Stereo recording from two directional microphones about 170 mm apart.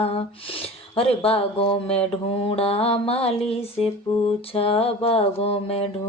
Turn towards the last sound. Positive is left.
turn(degrees=35)  # may be behind; listen again after turning